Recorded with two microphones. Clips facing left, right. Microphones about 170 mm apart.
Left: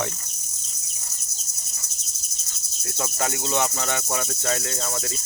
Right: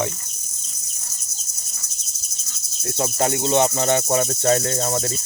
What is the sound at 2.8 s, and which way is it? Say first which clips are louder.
Cricket: right 6 dB; 35° right (ahead or behind).